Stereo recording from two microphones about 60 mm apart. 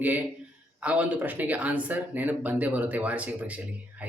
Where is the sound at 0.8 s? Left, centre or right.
Right.